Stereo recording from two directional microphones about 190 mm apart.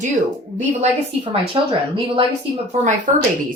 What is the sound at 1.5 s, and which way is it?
Speech, 25° right (ahead or behind).